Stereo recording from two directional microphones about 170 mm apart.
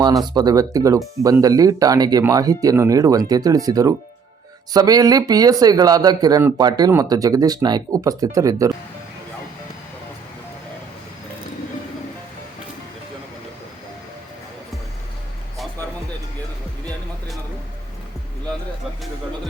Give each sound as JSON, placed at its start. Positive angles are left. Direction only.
{"t": 0.0, "sound": "speech", "side_deg": -25}